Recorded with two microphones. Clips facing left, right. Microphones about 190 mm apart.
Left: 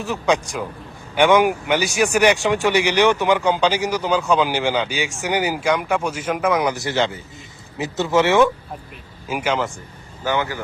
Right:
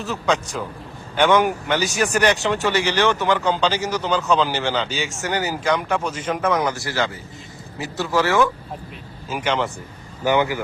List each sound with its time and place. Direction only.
0.0 s speech: 15° left (ahead or behind)
9.3 s speech: 5° left (ahead or behind)
10.2 s speech: 15° right (ahead or behind)